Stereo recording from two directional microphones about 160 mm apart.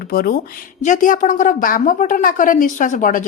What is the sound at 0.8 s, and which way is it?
A woman's voice, 55° left (ahead or behind).